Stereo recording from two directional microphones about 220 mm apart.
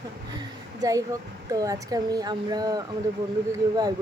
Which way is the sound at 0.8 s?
15° right (ahead or behind).